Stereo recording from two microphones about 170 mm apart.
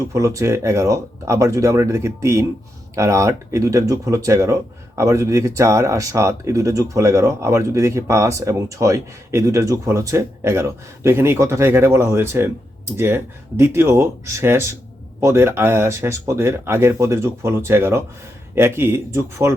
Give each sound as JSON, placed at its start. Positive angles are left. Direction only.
{"t": 0.0, "sound": "speech", "side_deg": -20}